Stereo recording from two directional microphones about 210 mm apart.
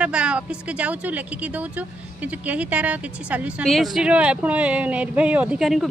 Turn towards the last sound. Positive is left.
turn(degrees=0)  # may be behind; listen again after turning